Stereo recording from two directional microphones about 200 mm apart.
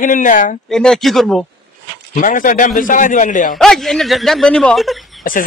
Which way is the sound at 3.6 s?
Centre (ahead or behind).